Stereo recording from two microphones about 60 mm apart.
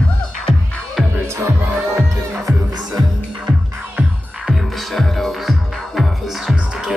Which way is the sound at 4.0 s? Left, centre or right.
Right.